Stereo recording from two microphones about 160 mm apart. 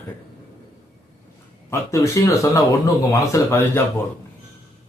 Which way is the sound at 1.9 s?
20° left (ahead or behind).